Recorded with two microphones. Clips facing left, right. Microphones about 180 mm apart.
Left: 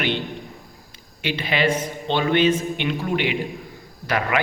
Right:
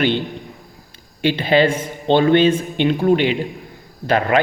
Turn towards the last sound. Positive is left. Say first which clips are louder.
# right 6 dB
turn(degrees=-30)  # may be behind; listen again after turning